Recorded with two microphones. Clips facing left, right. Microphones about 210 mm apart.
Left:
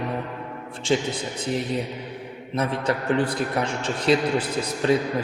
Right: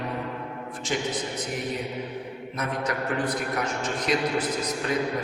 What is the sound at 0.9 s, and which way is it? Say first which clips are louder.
Speech: left 7 dB; 30° left (ahead or behind).